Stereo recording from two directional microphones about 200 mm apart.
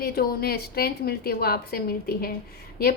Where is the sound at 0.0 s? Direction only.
50° left (ahead or behind).